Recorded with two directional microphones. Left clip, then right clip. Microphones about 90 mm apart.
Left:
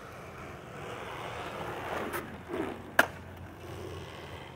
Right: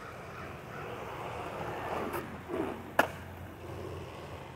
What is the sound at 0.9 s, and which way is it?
Vehicle, 20° left (ahead or behind).